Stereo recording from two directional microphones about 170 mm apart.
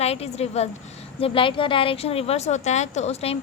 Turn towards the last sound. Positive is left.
turn(degrees=35)  # may be behind; listen again after turning